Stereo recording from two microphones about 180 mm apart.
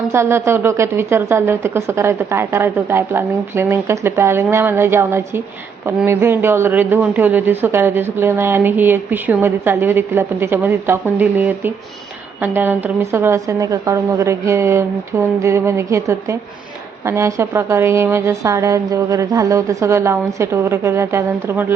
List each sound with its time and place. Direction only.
0.1 s a man's voice: 15° right (ahead or behind)